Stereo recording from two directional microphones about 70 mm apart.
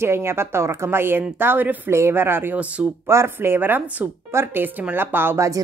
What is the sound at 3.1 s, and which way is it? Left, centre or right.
A woman's voice, right.